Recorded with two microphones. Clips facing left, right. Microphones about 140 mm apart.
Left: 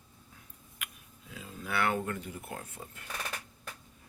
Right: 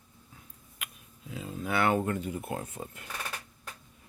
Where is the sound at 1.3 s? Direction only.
25° right (ahead or behind).